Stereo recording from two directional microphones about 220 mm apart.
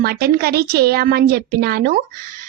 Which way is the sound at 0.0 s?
45° right (ahead or behind).